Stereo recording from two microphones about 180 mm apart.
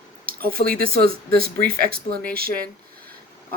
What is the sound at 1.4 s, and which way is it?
Speech, 55° right (ahead or behind).